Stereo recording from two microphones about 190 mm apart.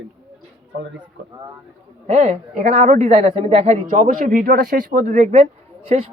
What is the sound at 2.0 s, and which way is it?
Speech, 35° right (ahead or behind).